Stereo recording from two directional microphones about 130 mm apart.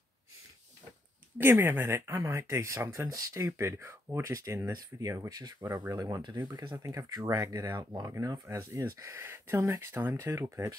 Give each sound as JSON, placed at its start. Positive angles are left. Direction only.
{"t": 1.4, "sound": "speech", "side_deg": -15}
{"t": 6.8, "sound": "speech", "side_deg": -25}